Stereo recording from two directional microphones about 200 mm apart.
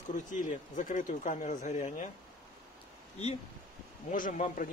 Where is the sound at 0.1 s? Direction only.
40° left (ahead or behind).